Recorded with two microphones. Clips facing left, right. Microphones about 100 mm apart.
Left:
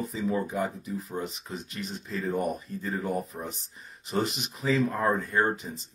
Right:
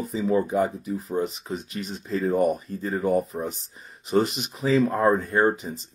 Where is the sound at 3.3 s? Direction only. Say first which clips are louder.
Right 7 dB; 25° right (ahead or behind).